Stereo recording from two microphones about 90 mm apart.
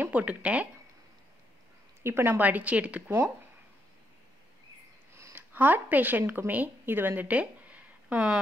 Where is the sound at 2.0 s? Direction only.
25° right (ahead or behind).